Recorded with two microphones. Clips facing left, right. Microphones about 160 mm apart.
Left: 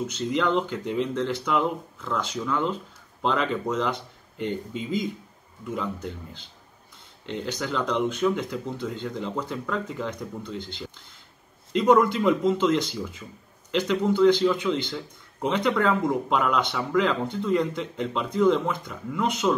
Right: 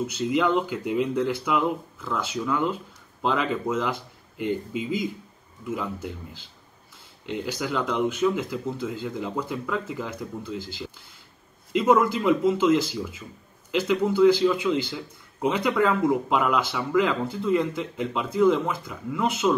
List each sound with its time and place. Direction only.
0.0 s speech: 10° right (ahead or behind)